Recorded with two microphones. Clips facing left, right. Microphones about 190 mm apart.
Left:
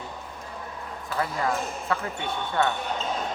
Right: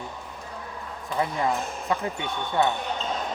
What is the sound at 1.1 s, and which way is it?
Speech, 20° right (ahead or behind).